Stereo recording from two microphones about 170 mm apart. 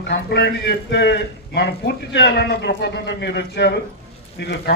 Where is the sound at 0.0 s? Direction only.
85° left.